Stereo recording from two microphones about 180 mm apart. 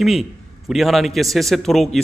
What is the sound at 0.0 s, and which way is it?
A man's voice, centre (ahead or behind).